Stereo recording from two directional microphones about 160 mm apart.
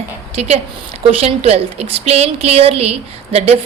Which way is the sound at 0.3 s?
40° right (ahead or behind).